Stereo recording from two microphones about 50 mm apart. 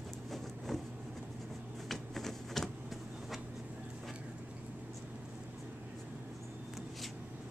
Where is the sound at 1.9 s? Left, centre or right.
Centre.